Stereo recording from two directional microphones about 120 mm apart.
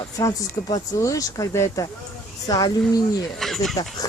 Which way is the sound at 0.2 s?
30° left (ahead or behind).